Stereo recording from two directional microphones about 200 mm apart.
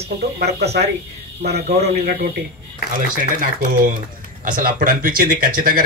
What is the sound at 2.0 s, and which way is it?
Speech, 50° right (ahead or behind).